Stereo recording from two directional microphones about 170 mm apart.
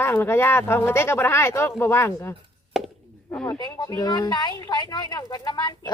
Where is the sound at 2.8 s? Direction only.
Centre (ahead or behind).